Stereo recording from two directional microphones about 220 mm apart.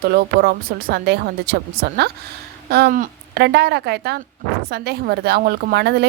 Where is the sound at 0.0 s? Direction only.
45° right (ahead or behind).